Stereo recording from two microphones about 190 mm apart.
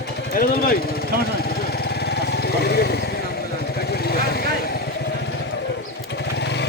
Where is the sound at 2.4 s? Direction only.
55° left (ahead or behind).